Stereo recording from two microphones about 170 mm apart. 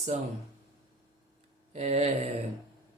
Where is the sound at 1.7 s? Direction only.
40° right (ahead or behind).